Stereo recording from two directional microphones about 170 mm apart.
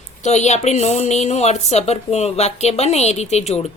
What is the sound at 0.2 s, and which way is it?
Speech, 40° left (ahead or behind).